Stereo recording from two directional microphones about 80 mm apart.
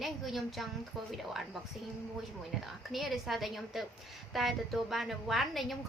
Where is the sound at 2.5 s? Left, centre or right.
Centre.